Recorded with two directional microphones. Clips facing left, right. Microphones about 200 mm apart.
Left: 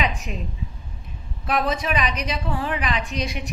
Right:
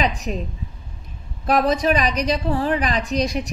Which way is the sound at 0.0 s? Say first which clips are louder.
Right 4 dB; 40° right (ahead or behind).